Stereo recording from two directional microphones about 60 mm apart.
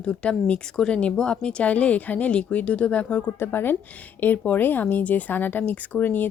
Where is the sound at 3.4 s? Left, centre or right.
Left.